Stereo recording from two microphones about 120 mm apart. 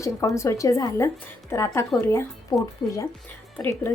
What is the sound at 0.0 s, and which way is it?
A woman's voice, 25° left (ahead or behind).